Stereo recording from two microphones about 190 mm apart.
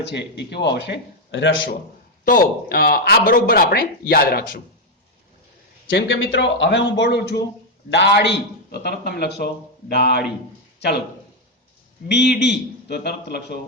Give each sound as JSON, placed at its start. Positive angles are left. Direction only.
{"t": 0.0, "sound": "a man's voice", "side_deg": 65}
{"t": 2.2, "sound": "speech", "side_deg": 50}
{"t": 5.9, "sound": "a man's voice", "side_deg": 80}
{"t": 12.0, "sound": "a man's voice", "side_deg": 60}